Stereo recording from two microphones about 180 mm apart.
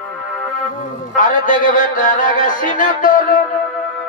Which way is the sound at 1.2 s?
45° left (ahead or behind).